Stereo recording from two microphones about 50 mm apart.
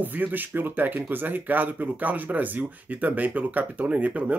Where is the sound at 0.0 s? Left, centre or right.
Right.